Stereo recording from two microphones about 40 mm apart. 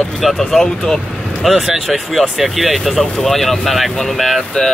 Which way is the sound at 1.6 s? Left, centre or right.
Centre.